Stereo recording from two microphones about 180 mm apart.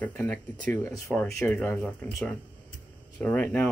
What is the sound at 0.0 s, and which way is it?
Speech, 10° left (ahead or behind).